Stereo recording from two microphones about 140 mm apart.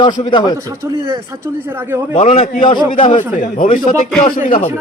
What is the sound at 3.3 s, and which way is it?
Speech, 65° left (ahead or behind).